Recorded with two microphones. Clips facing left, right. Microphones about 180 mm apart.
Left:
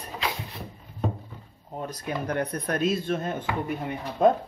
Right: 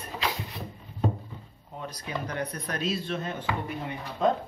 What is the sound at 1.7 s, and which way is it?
Speech, 45° left (ahead or behind).